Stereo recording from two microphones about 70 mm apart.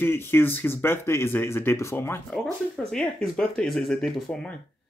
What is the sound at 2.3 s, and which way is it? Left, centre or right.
Speech, centre.